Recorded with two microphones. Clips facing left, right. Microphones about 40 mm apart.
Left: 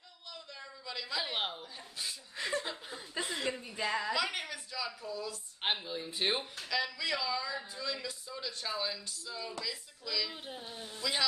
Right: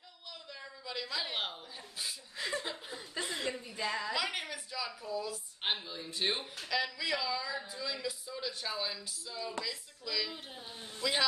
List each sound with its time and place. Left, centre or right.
0.3 s a sound: centre
1.0 s speech: centre
3.5 s speech: centre
4.1 s speech: centre
5.6 s speech: centre
6.6 s speech: centre
11.0 s a man's voice: centre